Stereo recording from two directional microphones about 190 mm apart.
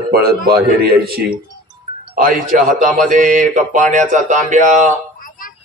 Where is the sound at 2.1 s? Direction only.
45° right (ahead or behind).